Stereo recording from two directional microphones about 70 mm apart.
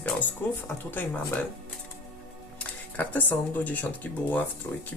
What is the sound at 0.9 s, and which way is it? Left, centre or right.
Speech, left.